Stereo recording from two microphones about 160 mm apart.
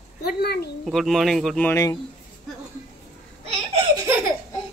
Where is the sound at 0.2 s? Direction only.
90° left.